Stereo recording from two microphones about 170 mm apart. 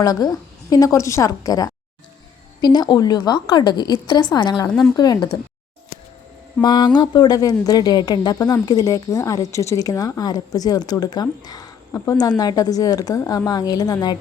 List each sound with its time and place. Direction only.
0.0 s speech: 25° left (ahead or behind)
6.6 s speech: 25° left (ahead or behind)